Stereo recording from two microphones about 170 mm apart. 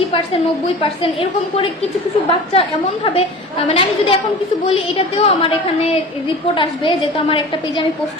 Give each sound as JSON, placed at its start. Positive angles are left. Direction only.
{"t": 0.8, "sound": "a woman's voice", "side_deg": 35}
{"t": 6.5, "sound": "a woman's voice", "side_deg": 30}